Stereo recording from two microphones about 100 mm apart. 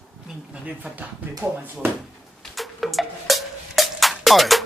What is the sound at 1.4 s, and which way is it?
Speech, 20° right (ahead or behind).